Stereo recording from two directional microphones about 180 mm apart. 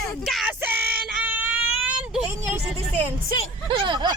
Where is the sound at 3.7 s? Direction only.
25° right (ahead or behind).